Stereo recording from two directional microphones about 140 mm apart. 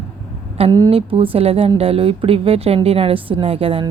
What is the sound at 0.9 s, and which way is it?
A woman's voice, 45° right (ahead or behind).